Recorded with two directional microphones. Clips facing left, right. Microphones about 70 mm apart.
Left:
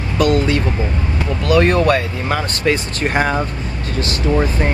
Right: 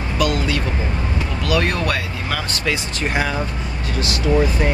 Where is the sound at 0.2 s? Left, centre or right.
Left.